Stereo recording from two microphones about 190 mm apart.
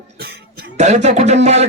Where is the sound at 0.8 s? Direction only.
35° right (ahead or behind).